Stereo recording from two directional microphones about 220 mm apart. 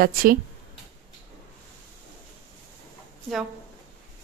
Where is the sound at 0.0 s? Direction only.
40° right (ahead or behind).